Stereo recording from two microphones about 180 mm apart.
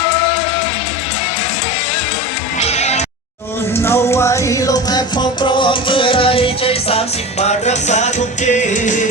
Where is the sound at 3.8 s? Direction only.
15° left (ahead or behind).